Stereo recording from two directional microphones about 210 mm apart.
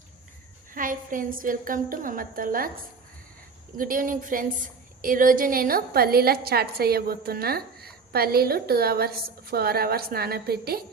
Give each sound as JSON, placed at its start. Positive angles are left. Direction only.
{"t": 0.7, "sound": "a woman's voice", "side_deg": -40}
{"t": 3.8, "sound": "a woman's voice", "side_deg": -40}